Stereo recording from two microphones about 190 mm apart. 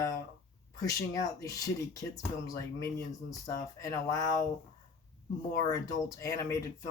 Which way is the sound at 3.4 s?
20° left (ahead or behind).